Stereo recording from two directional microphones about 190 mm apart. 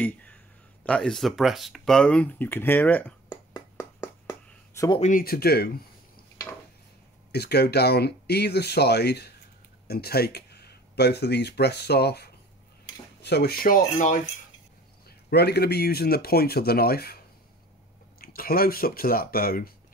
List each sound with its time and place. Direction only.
0.0 s a sound: 10° left (ahead or behind)
0.8 s speech: 5° left (ahead or behind)
3.3 s a sound: 20° left (ahead or behind)
5.1 s speech: 55° left (ahead or behind)
7.3 s speech: 60° left (ahead or behind); by 14.2 s 45° left (ahead or behind)
15.0 s speech: 55° left (ahead or behind)
18.2 s speech: 50° left (ahead or behind)